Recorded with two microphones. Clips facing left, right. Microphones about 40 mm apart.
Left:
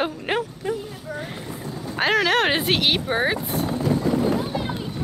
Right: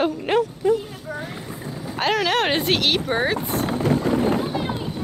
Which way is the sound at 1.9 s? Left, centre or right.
Centre.